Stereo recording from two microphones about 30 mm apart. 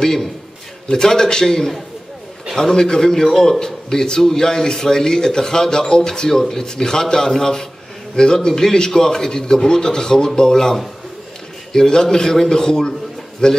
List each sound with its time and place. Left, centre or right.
0.9 s a man's voice: centre